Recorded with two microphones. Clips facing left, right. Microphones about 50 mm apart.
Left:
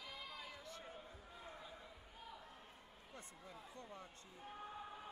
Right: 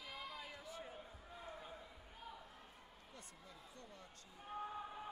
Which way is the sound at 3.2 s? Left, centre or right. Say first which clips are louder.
Left 4 dB; left.